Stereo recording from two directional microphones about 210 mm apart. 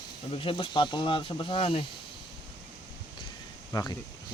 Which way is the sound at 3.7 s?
15° left (ahead or behind).